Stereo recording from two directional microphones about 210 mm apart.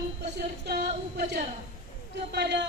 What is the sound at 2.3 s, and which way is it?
Speech, 55° right (ahead or behind).